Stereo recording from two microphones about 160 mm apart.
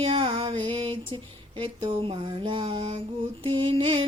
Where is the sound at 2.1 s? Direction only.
30° right (ahead or behind).